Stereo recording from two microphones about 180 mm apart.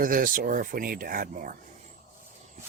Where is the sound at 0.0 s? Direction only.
50° right (ahead or behind).